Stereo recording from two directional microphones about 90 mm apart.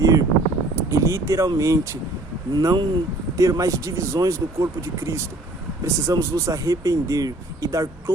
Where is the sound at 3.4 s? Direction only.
35° right (ahead or behind).